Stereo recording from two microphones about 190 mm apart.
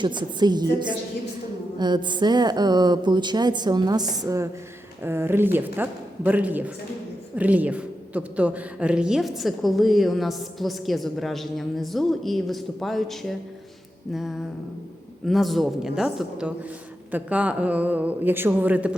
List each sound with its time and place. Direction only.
0.0 s a woman's voice: 25° right (ahead or behind); by 18.9 s 10° right (ahead or behind)